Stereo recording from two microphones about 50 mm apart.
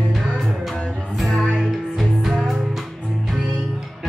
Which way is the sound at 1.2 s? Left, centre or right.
Centre.